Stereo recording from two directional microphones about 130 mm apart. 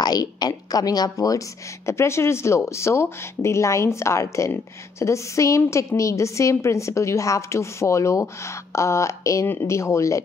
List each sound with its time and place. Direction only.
0.0 s speech: 30° left (ahead or behind)